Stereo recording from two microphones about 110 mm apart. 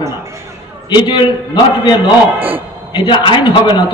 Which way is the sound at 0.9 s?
40° left (ahead or behind).